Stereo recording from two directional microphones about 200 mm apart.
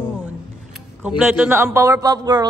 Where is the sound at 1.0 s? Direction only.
5° right (ahead or behind).